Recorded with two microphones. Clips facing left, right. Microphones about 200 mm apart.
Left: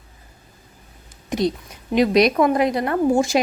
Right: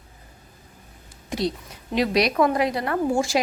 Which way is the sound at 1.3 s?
20° left (ahead or behind).